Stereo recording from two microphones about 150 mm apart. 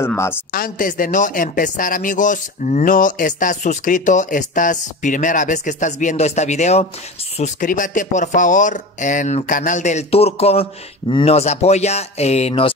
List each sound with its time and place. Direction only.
0.0 s speech: 15° left (ahead or behind)
0.5 s a man's voice: 70° left (ahead or behind); by 12.7 s 40° left (ahead or behind)